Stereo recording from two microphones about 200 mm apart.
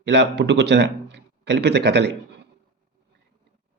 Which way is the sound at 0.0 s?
60° right (ahead or behind).